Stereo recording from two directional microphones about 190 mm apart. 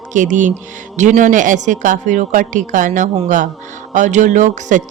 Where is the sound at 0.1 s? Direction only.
40° right (ahead or behind).